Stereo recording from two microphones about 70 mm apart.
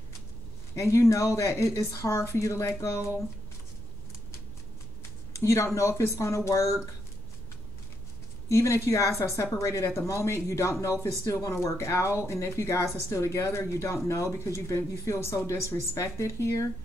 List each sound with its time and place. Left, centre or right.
0.7 s speech: left
5.3 s speech: left
8.5 s speech: left
11.5 s speech: left